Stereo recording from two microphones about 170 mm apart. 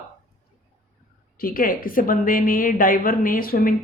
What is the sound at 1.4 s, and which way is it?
A woman's voice, 55° left (ahead or behind).